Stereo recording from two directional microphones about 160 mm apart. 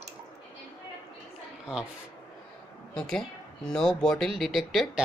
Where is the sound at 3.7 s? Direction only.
5° left (ahead or behind).